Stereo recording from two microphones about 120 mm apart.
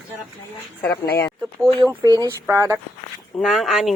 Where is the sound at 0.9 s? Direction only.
20° left (ahead or behind).